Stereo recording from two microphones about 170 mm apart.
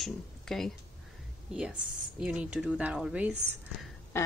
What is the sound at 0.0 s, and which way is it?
Speech, centre (ahead or behind).